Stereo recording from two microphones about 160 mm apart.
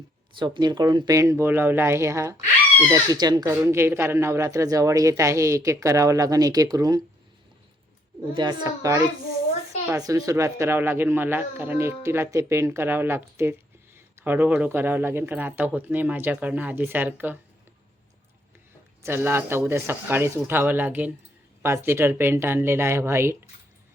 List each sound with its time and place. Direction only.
0.3 s speech: 30° right (ahead or behind)
3.5 s speech: 15° right (ahead or behind)
8.3 s speech: 25° right (ahead or behind); by 17.3 s 10° right (ahead or behind)
19.0 s speech: 15° right (ahead or behind)